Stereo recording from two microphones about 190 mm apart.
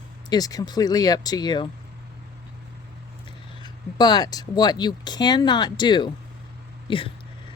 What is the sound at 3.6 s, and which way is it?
Speech, 25° left (ahead or behind).